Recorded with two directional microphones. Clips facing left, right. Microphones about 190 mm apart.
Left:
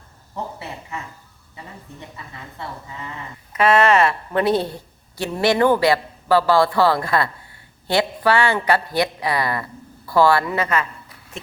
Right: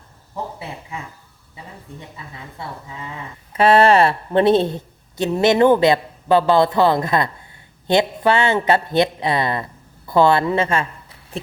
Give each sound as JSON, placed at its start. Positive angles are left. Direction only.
{"t": 3.5, "sound": "a woman's voice", "side_deg": -30}